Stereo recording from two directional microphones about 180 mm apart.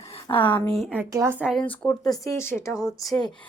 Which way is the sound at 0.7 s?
5° right (ahead or behind).